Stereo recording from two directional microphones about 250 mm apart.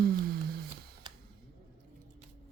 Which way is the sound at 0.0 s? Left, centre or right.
Right.